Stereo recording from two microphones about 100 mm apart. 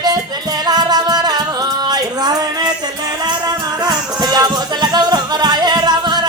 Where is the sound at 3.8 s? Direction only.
40° right (ahead or behind).